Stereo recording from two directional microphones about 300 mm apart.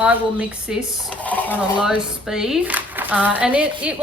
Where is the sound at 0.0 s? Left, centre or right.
Centre.